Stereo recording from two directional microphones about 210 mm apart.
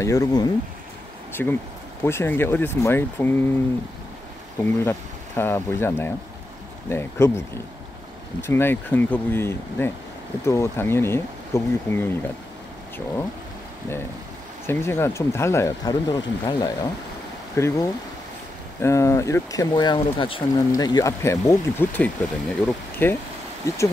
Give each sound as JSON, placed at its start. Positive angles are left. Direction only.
{"t": 0.0, "sound": "speech", "side_deg": 15}
{"t": 4.6, "sound": "speech", "side_deg": 10}
{"t": 14.7, "sound": "speech", "side_deg": 10}